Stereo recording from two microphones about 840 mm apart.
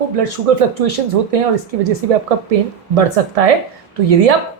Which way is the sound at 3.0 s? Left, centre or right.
Right.